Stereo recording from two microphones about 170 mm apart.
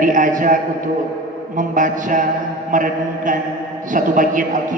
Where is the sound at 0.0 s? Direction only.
50° right (ahead or behind).